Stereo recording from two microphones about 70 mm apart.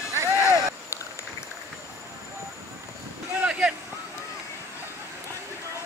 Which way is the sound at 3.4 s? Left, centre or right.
Centre.